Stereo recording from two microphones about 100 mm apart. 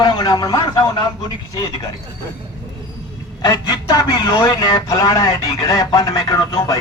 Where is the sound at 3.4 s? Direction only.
40° left (ahead or behind).